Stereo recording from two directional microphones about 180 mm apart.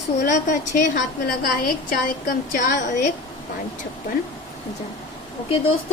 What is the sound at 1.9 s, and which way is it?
A woman's voice, 55° left (ahead or behind).